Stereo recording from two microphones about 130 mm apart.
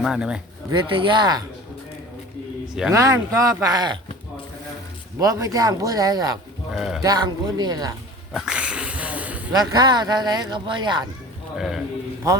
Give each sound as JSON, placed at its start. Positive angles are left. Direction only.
{"t": 0.0, "sound": "speech", "side_deg": -5}
{"t": 0.7, "sound": "speech", "side_deg": -40}
{"t": 2.9, "sound": "speech", "side_deg": -25}
{"t": 5.2, "sound": "speech", "side_deg": -25}
{"t": 6.7, "sound": "a man's voice", "side_deg": -5}
{"t": 7.0, "sound": "speech", "side_deg": -30}
{"t": 8.3, "sound": "cat", "side_deg": -5}
{"t": 9.5, "sound": "speech", "side_deg": -30}
{"t": 11.5, "sound": "a man's voice", "side_deg": 0}